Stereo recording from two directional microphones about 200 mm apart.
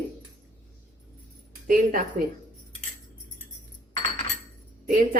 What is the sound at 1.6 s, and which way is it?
Speech, 45° right (ahead or behind).